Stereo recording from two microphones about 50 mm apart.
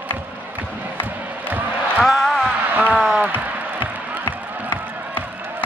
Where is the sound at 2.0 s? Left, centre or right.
Centre.